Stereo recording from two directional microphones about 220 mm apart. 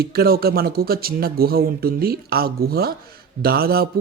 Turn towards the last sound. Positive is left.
turn(degrees=-45)  # may be behind; listen again after turning